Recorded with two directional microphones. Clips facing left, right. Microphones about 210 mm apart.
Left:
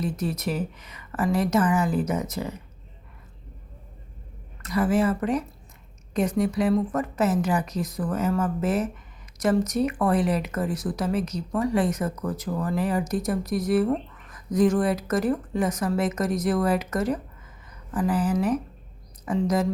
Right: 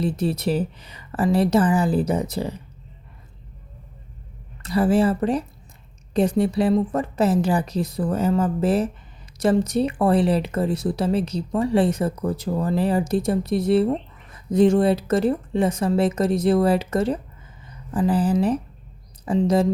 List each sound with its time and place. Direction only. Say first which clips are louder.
0.0 s a woman's voice: right 5 dB; 30° right (ahead or behind)
4.6 s a woman's voice: right 4 dB; 30° right (ahead or behind)